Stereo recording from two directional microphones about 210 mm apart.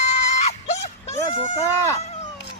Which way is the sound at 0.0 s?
30° left (ahead or behind).